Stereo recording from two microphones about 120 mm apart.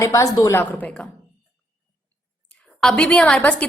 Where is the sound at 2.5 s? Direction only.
5° left (ahead or behind).